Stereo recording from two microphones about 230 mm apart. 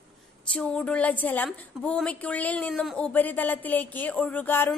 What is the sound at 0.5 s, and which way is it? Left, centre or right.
Speech, centre.